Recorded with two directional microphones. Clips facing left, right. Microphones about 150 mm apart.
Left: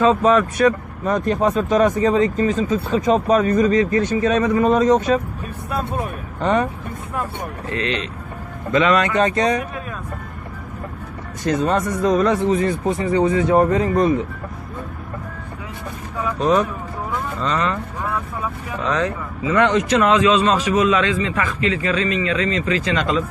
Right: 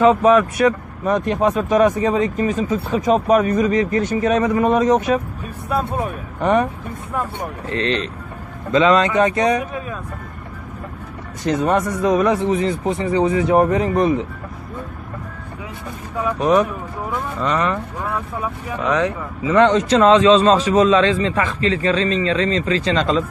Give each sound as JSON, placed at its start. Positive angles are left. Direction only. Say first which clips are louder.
{"t": 0.0, "sound": "speech", "louder": "right 2 dB", "side_deg": -15}
{"t": 6.4, "sound": "speech", "louder": "right 2 dB", "side_deg": -15}
{"t": 7.7, "sound": "a man's voice", "louder": "right 3 dB", "side_deg": -35}
{"t": 8.7, "sound": "speech", "louder": "right 2 dB", "side_deg": -25}
{"t": 9.1, "sound": "speech", "louder": "right 1 dB", "side_deg": -15}
{"t": 11.4, "sound": "speech", "louder": "right 1 dB", "side_deg": -15}
{"t": 16.3, "sound": "speech", "louder": "right 1 dB", "side_deg": -10}
{"t": 18.9, "sound": "speech", "louder": "right 2 dB", "side_deg": -10}
{"t": 19.4, "sound": "a man's voice", "louder": "right 3 dB", "side_deg": -25}